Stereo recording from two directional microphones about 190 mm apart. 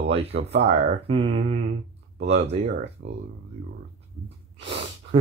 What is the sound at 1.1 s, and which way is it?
Speech, 30° right (ahead or behind).